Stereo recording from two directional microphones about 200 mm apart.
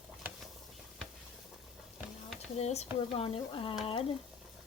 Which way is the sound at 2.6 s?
30° left (ahead or behind).